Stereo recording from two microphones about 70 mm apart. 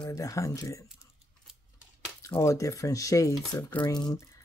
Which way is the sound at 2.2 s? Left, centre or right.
Left.